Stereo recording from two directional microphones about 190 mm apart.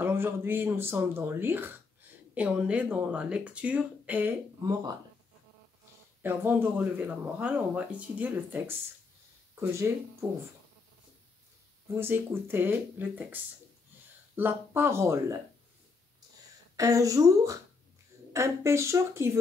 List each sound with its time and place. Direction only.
0.0 s speech: 10° right (ahead or behind)
6.2 s speech: 10° right (ahead or behind)
12.0 s speech: 10° right (ahead or behind)
16.7 s speech: 15° right (ahead or behind)